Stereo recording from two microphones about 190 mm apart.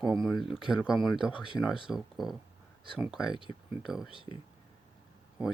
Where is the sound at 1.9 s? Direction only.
Centre (ahead or behind).